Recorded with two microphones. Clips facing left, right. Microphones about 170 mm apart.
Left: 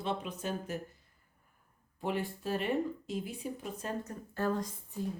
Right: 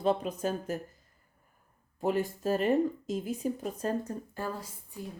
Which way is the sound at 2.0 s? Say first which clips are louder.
Right 6 dB; 45° right (ahead or behind).